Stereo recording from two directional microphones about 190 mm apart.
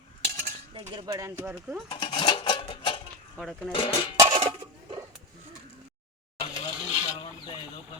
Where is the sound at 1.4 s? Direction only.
5° right (ahead or behind).